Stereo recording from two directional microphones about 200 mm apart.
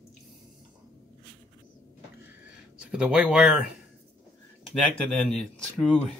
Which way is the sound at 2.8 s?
5° right (ahead or behind).